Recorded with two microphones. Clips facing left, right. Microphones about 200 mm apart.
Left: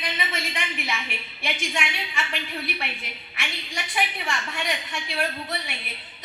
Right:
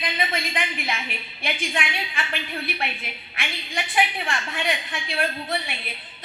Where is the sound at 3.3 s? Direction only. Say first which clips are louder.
Right 3 dB; 55° right (ahead or behind).